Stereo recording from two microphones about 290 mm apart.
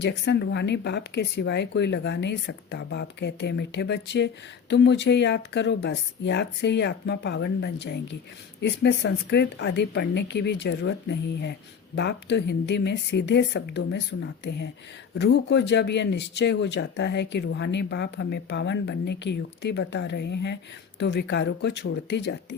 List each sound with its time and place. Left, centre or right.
0.0 s speech: left